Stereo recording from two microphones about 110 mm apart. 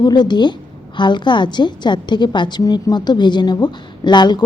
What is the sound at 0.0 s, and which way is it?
A woman's voice, 40° left (ahead or behind).